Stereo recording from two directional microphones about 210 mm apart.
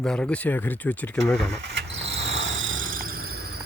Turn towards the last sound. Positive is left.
turn(degrees=-50)  # may be behind; listen again after turning